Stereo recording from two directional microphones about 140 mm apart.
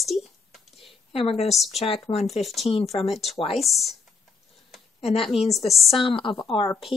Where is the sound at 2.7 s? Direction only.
45° left (ahead or behind).